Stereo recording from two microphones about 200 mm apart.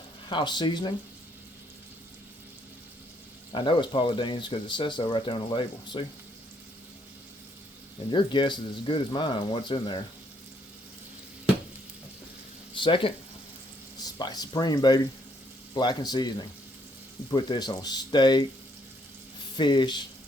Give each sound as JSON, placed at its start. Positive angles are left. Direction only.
{"t": 0.3, "sound": "speech", "side_deg": 25}
{"t": 3.5, "sound": "speech", "side_deg": 25}
{"t": 8.1, "sound": "speech", "side_deg": 25}
{"t": 12.7, "sound": "speech", "side_deg": 25}
{"t": 17.3, "sound": "speech", "side_deg": 20}
{"t": 19.5, "sound": "speech", "side_deg": 20}